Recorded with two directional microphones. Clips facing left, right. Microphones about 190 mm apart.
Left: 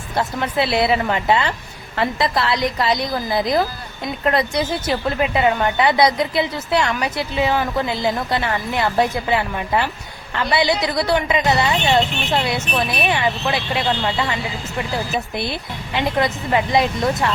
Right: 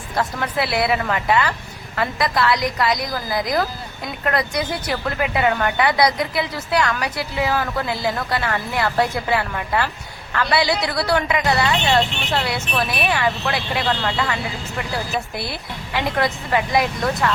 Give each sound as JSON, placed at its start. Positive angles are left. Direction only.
{"t": 0.2, "sound": "a woman's voice", "side_deg": 25}